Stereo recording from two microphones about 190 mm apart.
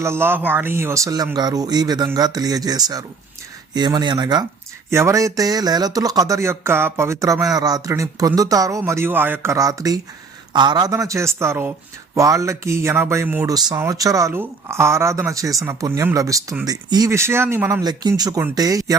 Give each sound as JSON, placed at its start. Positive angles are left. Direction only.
{"t": 0.0, "sound": "speech", "side_deg": -15}